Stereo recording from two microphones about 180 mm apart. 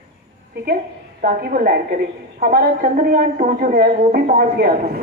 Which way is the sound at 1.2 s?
50° right (ahead or behind).